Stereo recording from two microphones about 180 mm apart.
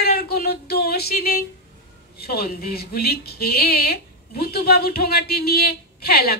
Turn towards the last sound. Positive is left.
turn(degrees=60)  # may be behind; listen again after turning